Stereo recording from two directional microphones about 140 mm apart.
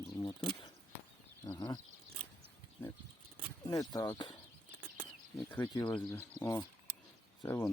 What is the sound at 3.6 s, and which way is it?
Speech, 25° left (ahead or behind).